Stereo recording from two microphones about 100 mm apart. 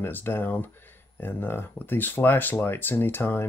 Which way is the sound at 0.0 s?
20° left (ahead or behind).